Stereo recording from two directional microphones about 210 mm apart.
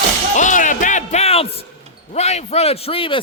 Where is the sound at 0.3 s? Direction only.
35° left (ahead or behind).